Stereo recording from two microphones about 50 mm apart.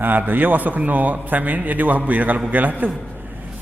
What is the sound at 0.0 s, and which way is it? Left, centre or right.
A man's voice, right.